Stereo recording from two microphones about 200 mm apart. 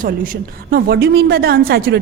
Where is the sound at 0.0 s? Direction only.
45° right (ahead or behind).